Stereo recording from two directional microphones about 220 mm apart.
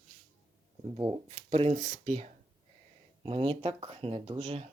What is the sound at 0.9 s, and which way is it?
Speech, 25° right (ahead or behind).